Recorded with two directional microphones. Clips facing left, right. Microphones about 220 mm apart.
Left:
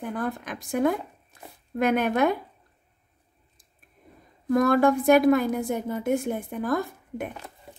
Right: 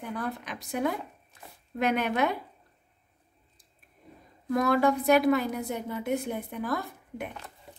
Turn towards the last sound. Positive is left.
turn(degrees=50)  # may be behind; listen again after turning